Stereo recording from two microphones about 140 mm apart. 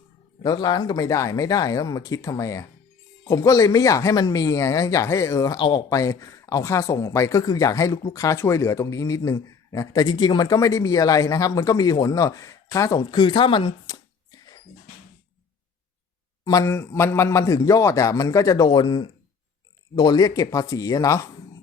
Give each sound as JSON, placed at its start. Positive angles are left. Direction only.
{"t": 0.4, "sound": "speech", "side_deg": 30}
{"t": 16.4, "sound": "speech", "side_deg": 25}